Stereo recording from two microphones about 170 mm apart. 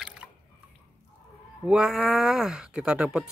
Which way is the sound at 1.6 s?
5° right (ahead or behind).